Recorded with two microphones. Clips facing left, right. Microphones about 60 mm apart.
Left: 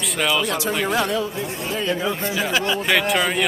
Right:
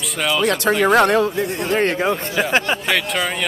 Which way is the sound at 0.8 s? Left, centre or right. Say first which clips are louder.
Right 10 dB; right.